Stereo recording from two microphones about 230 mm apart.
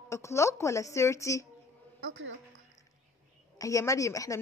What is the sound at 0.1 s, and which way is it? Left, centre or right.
A woman's voice, centre.